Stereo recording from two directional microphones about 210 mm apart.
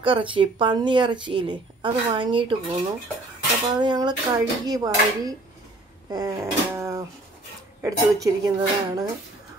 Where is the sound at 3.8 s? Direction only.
20° right (ahead or behind).